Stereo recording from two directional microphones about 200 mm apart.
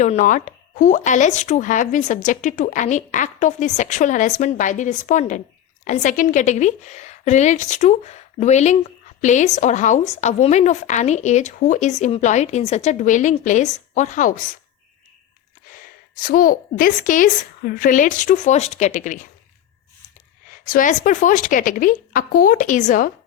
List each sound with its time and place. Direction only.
0.0 s speech: 40° left (ahead or behind)
15.6 s speech: 45° left (ahead or behind)
20.5 s speech: 45° left (ahead or behind)